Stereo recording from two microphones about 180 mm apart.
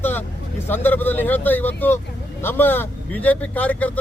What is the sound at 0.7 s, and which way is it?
Speech, 10° left (ahead or behind).